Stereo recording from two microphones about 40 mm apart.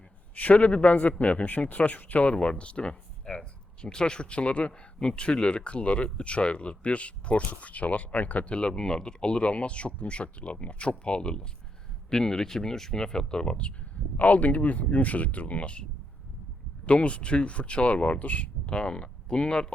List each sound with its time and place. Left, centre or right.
0.3 s speech: left
8.5 s speech: left
12.1 s speech: centre
14.2 s speech: left
18.6 s speech: left